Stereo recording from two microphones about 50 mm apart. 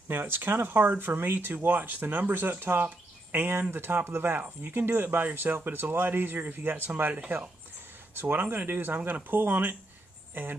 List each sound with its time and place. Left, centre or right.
0.1 s speech: right